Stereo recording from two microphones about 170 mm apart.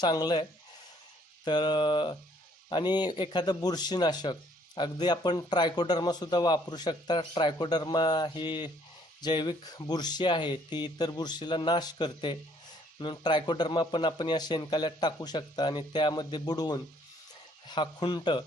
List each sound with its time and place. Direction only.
0.0 s speech: 25° left (ahead or behind)
1.5 s speech: 25° left (ahead or behind)